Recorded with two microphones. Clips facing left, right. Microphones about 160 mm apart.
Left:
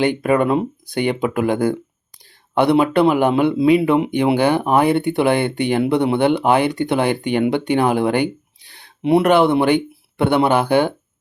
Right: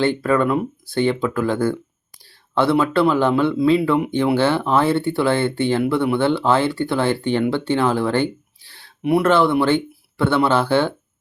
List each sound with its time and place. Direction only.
0.0 s speech: 15° left (ahead or behind)